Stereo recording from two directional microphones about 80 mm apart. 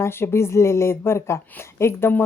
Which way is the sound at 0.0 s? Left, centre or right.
Left.